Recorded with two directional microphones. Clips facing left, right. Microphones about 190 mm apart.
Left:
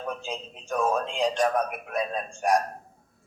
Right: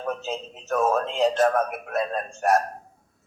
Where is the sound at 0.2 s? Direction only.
5° right (ahead or behind).